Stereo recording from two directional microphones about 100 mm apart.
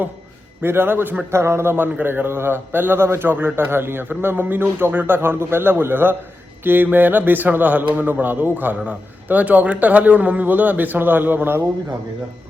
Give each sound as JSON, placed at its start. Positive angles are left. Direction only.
{"t": 0.6, "sound": "a man's voice", "side_deg": -20}